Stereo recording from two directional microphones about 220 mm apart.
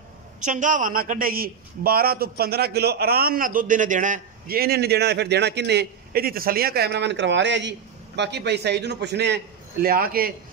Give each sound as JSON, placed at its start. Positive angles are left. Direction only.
{"t": 0.4, "sound": "a man's voice", "side_deg": -35}